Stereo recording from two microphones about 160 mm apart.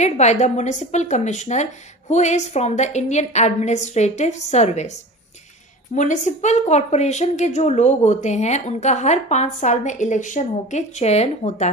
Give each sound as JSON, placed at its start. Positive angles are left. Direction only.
{"t": 0.0, "sound": "a woman's voice", "side_deg": 45}
{"t": 5.9, "sound": "a woman's voice", "side_deg": 50}